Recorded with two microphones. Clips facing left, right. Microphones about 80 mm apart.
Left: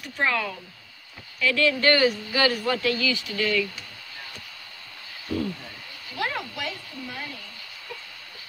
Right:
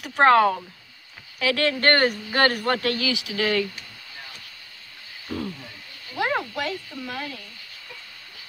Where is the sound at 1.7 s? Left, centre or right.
Right.